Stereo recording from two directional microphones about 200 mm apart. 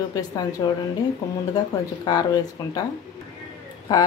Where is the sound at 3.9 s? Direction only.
20° left (ahead or behind).